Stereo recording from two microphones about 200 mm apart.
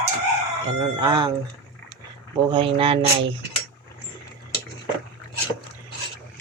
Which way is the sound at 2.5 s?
30° right (ahead or behind).